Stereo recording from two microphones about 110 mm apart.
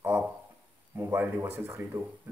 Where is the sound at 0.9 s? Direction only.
20° right (ahead or behind).